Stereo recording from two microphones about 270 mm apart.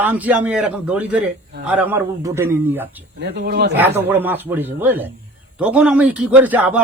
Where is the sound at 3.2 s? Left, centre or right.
Right.